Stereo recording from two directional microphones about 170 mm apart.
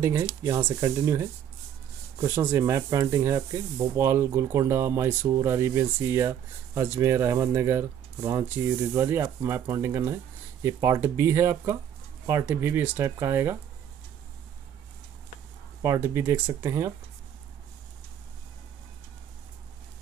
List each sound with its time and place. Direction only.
0.0 s speech: 15° right (ahead or behind)
0.6 s speech: 30° right (ahead or behind)
0.8 s speech: 20° right (ahead or behind)
15.8 s speech: 15° right (ahead or behind)